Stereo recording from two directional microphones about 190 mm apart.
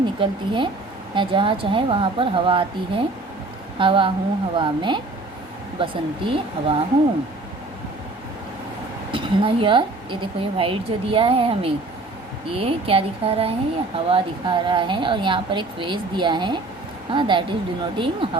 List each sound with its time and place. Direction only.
0.2 s speech: 25° right (ahead or behind)
9.1 s speech: 25° right (ahead or behind)